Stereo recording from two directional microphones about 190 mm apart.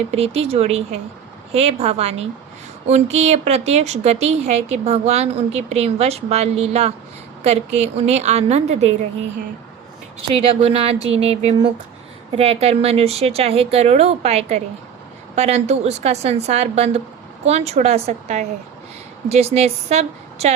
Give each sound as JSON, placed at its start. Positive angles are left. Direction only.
{"t": 0.1, "sound": "a woman's voice", "side_deg": -35}
{"t": 10.4, "sound": "a woman's voice", "side_deg": -30}